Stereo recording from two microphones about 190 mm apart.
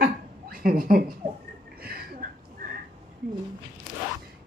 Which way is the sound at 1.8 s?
55° right (ahead or behind).